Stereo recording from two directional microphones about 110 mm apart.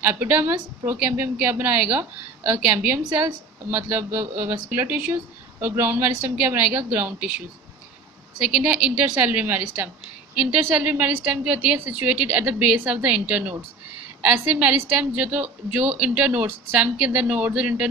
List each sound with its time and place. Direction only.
0.0 s a woman's voice: 15° right (ahead or behind)